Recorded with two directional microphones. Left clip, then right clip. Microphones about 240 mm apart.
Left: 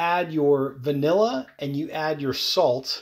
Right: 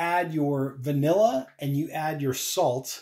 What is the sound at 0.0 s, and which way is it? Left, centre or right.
Speech, left.